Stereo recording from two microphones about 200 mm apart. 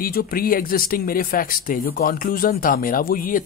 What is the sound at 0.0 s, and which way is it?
Speech, 50° left (ahead or behind).